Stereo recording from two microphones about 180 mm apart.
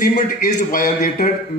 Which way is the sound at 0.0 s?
55° left (ahead or behind).